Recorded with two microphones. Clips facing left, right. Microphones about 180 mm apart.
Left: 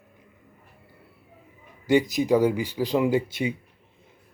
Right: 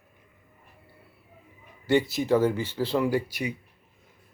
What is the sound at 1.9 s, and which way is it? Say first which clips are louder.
Speech: left 2 dB; 15° left (ahead or behind).